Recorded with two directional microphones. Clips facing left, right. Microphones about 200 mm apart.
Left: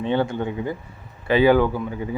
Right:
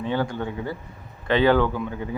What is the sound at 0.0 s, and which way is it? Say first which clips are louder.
Speech: left 3 dB; 25° left (ahead or behind).